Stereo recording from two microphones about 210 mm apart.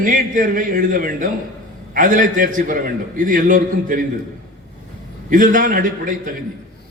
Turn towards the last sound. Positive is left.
turn(degrees=-40)  # may be behind; listen again after turning